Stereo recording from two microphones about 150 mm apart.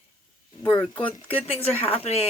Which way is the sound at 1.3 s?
40° left (ahead or behind).